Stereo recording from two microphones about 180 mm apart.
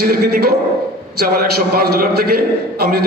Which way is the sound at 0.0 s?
60° right (ahead or behind).